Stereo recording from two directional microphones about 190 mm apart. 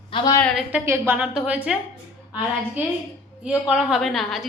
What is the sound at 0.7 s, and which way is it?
A woman's voice, 10° right (ahead or behind).